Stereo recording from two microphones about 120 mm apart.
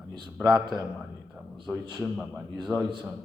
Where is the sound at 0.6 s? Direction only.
35° right (ahead or behind).